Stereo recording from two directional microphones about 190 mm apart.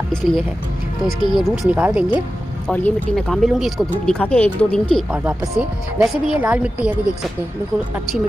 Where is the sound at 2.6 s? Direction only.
5° left (ahead or behind).